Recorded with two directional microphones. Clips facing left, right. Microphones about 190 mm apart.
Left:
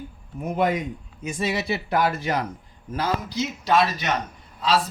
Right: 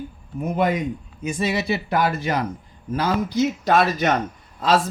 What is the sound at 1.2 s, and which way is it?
A man's voice, 60° right (ahead or behind).